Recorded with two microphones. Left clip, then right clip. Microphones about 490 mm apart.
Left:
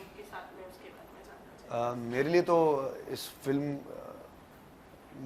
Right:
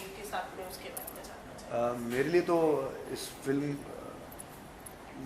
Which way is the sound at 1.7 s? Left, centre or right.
Left.